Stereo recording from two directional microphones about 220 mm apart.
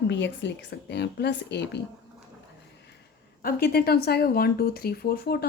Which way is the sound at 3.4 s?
45° left (ahead or behind).